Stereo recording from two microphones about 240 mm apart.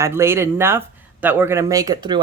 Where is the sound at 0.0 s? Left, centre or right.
Centre.